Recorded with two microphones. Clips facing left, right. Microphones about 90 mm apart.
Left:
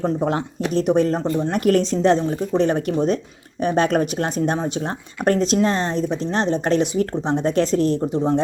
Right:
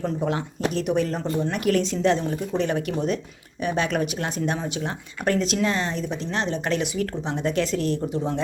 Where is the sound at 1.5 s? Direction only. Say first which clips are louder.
Left 6 dB; 40° left (ahead or behind).